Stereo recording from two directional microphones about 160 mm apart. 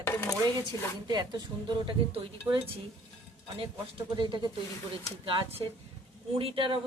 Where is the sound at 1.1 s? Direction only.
25° right (ahead or behind).